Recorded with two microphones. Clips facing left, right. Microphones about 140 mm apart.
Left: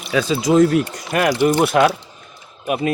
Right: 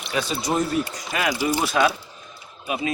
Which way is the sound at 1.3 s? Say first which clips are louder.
Left 8 dB; 65° left (ahead or behind).